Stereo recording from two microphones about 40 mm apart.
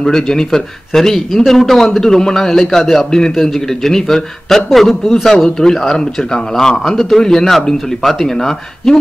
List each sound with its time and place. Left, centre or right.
0.0 s a man's voice: centre
6.8 s a man's voice: centre